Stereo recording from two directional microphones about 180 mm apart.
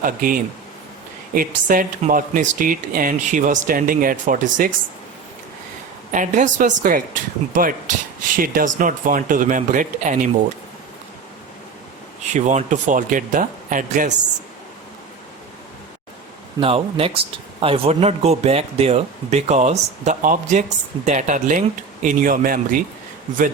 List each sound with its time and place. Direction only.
0.0 s speech: 50° right (ahead or behind)
6.1 s speech: 45° right (ahead or behind)
12.3 s speech: 40° right (ahead or behind)
16.6 s speech: 30° right (ahead or behind); by 22.8 s 50° right (ahead or behind)